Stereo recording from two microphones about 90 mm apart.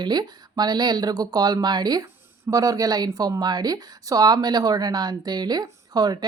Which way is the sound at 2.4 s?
40° right (ahead or behind).